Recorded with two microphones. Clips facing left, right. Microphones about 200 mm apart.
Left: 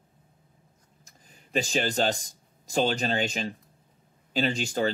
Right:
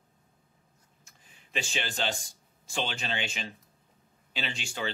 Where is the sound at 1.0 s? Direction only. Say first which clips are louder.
Left 6 dB; 40° left (ahead or behind).